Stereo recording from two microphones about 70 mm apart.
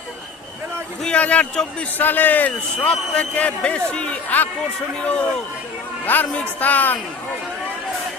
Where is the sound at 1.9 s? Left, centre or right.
Left.